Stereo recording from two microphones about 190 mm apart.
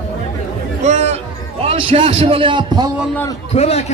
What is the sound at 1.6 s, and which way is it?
A man's voice, 30° right (ahead or behind).